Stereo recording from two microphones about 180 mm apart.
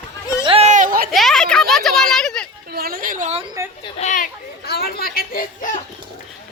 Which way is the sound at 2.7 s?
55° right (ahead or behind).